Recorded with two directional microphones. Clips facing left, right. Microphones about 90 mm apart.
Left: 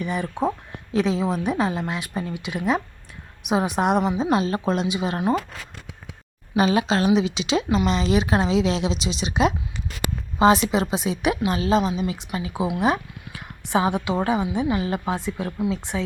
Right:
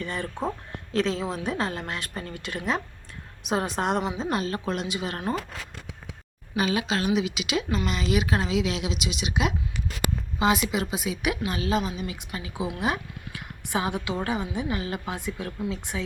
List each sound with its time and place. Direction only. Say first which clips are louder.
0.0 s a woman's voice: left 6 dB; 10° left (ahead or behind)
6.6 s a woman's voice: left 6 dB; 30° left (ahead or behind)